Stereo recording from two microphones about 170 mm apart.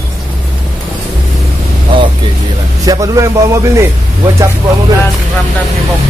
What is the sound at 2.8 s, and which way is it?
Speech, 20° right (ahead or behind).